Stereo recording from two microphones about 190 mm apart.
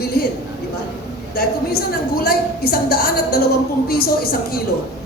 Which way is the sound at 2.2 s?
55° left (ahead or behind).